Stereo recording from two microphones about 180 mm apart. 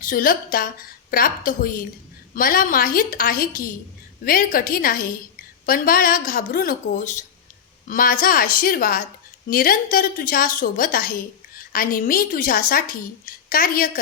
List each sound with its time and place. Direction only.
0.0 s speech: 50° left (ahead or behind)